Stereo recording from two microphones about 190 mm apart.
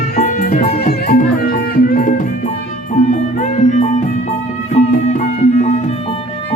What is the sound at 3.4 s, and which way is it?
Music, 40° left (ahead or behind).